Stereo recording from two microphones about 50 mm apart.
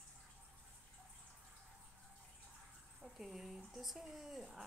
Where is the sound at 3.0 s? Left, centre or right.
Centre.